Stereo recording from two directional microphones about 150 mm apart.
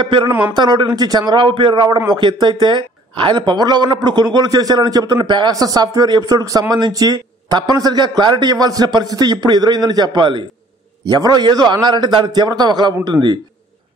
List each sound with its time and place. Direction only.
0.0 s a man's voice: 35° right (ahead or behind)
0.3 s a man's voice: 10° right (ahead or behind)
0.6 s a man's voice: 30° right (ahead or behind)